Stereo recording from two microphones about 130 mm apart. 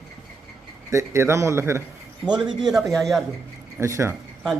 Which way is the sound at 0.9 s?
20° right (ahead or behind).